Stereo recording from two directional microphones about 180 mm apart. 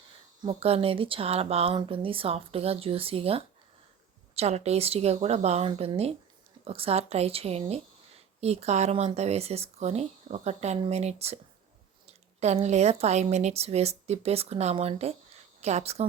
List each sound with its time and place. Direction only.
0.4 s speech: 35° right (ahead or behind)